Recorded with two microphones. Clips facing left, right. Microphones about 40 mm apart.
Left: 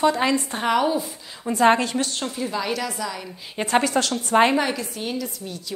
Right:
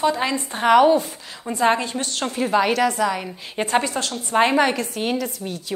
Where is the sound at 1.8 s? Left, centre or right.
Right.